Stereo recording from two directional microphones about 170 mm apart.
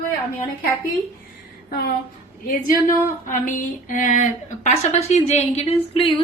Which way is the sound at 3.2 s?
50° left (ahead or behind).